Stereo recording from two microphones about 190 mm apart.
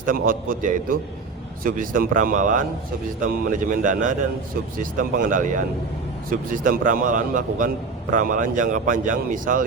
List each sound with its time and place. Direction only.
0.0 s speech: 45° right (ahead or behind)